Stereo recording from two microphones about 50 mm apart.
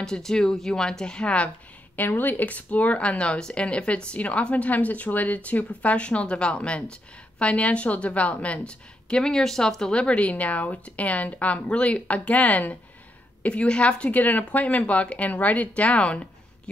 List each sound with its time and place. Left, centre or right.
0.0 s speech: centre
2.0 s speech: left; by 10.0 s centre
10.0 s speech: left
14.1 s speech: left